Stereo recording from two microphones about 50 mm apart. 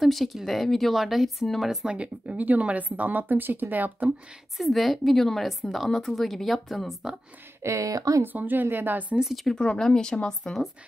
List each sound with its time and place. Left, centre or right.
0.0 s a woman's voice: centre
1.9 s speech: right
4.6 s a woman's voice: centre
7.6 s speech: right
8.3 s speech: right
9.2 s a woman's voice: centre
9.6 s speech: centre